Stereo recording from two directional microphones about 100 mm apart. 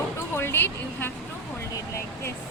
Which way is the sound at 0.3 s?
25° left (ahead or behind).